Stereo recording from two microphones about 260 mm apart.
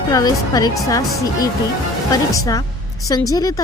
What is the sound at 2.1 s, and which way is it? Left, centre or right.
A woman's voice, centre.